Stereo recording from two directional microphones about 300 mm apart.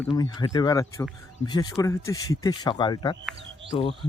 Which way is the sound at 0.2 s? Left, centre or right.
Centre.